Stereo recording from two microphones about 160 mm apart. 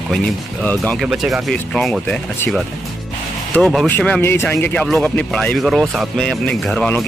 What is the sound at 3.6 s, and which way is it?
Speech, centre (ahead or behind).